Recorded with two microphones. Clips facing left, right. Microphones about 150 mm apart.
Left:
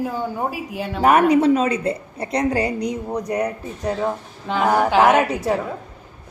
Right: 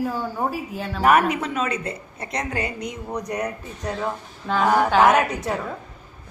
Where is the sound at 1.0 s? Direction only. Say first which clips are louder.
Left 4 dB; 30° left (ahead or behind).